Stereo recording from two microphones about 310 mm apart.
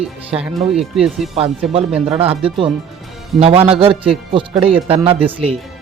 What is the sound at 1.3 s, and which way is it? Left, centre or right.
Speech, centre.